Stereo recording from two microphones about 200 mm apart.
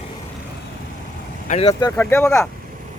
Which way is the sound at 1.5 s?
30° left (ahead or behind).